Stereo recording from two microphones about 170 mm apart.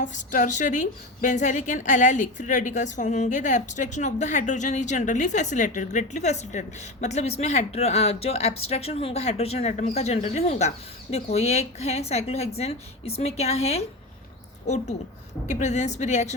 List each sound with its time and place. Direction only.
0.0 s a woman's voice: 45° left (ahead or behind)
15.4 s a woman's voice: 45° left (ahead or behind)